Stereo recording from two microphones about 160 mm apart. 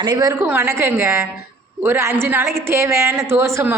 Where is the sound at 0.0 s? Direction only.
25° right (ahead or behind).